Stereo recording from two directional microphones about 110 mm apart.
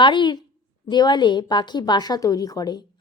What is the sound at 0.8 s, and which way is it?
A woman's voice, 40° left (ahead or behind).